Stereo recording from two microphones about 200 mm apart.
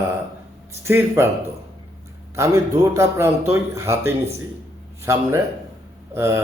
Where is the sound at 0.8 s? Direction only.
15° right (ahead or behind).